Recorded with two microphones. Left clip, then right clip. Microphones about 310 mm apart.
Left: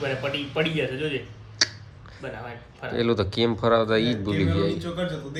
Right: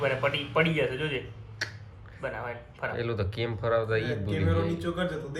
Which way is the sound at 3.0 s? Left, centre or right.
Centre.